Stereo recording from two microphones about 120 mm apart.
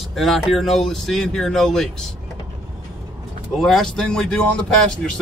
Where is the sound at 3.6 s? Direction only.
5° left (ahead or behind).